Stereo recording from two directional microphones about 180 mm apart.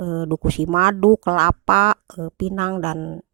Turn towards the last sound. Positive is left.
turn(degrees=-25)  # may be behind; listen again after turning